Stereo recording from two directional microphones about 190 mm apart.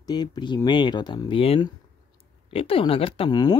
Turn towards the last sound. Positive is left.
turn(degrees=20)  # may be behind; listen again after turning